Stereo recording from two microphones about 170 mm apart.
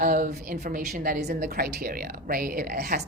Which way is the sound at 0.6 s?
50° right (ahead or behind).